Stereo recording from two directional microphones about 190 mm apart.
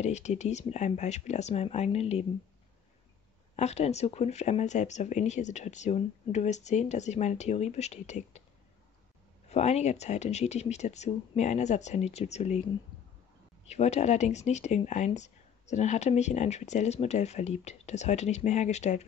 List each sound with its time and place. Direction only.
0.0 s speech: 35° left (ahead or behind)
3.5 s speech: 35° left (ahead or behind)
9.5 s speech: 35° left (ahead or behind)
13.7 s speech: 35° left (ahead or behind)